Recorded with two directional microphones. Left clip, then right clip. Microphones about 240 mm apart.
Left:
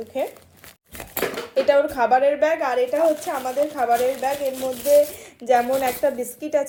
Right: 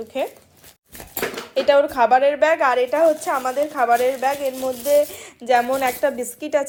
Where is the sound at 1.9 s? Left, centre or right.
Centre.